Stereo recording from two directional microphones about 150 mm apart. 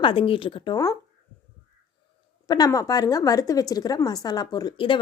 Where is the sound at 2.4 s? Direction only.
25° left (ahead or behind).